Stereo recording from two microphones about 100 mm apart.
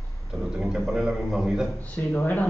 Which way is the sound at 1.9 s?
15° left (ahead or behind).